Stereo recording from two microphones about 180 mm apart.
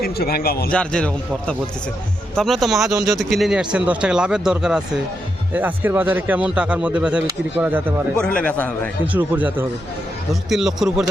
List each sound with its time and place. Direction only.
0.0 s a man's voice: 60° left (ahead or behind)
0.7 s speech: 5° left (ahead or behind); by 8.2 s 10° right (ahead or behind)
8.2 s a man's voice: 5° left (ahead or behind)
9.1 s speech: 10° right (ahead or behind)